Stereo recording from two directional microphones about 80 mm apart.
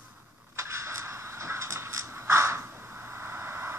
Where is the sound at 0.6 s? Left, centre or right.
Right.